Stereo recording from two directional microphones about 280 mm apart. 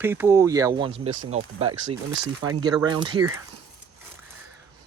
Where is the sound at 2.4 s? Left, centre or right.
Centre.